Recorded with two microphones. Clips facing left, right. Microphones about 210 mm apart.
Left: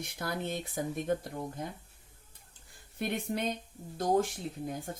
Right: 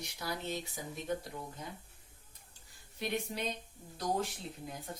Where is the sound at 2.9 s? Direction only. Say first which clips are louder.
Left 4 dB; 55° left (ahead or behind).